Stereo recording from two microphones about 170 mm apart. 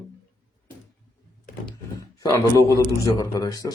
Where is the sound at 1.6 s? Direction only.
20° left (ahead or behind).